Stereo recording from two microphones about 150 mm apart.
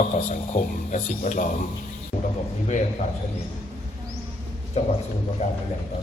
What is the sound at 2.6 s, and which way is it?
Speech, 55° left (ahead or behind).